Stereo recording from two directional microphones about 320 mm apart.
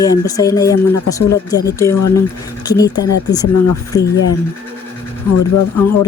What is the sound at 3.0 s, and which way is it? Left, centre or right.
Speech, left.